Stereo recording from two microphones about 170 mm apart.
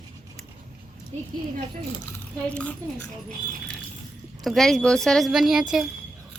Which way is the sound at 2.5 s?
10° left (ahead or behind).